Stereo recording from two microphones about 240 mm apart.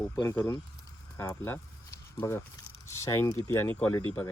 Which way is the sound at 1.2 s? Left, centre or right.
Centre.